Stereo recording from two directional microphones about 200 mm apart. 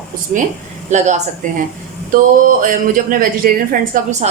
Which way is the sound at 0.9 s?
35° right (ahead or behind).